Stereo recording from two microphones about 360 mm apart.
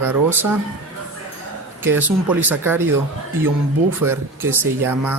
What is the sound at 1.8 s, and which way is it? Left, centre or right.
Speech, centre.